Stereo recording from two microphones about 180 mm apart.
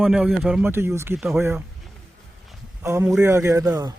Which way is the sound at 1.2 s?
Centre (ahead or behind).